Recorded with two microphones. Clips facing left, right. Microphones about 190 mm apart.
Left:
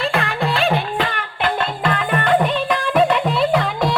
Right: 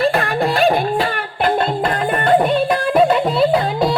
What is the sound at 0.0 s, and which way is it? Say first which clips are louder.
Music: right 4 dB; 35° right (ahead or behind).